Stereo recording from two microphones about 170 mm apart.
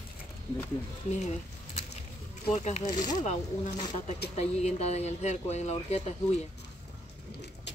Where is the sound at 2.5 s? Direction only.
40° left (ahead or behind).